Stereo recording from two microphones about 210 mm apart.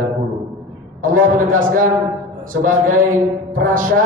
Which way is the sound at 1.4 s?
40° right (ahead or behind).